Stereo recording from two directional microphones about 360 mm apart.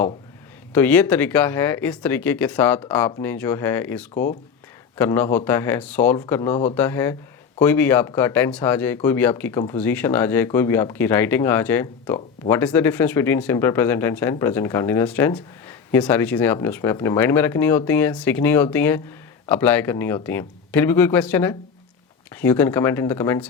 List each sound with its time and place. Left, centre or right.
0.7 s speech: centre
4.1 s speech: left
4.9 s speech: centre